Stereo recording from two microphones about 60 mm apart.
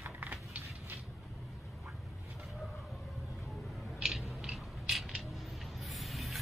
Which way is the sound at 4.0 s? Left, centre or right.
Centre.